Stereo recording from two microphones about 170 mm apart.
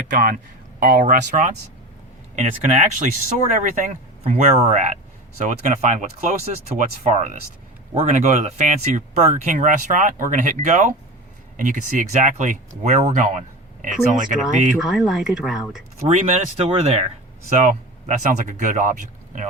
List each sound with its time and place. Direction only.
0.1 s speech: 55° right (ahead or behind)
14.8 s speech: centre (ahead or behind)
16.0 s speech: 40° right (ahead or behind)